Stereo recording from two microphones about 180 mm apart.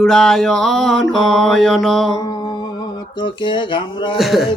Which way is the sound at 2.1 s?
20° left (ahead or behind).